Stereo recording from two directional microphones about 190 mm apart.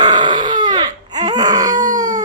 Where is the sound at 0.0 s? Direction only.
20° right (ahead or behind).